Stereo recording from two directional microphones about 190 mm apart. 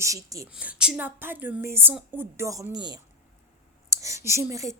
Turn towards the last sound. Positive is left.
turn(degrees=-15)  # may be behind; listen again after turning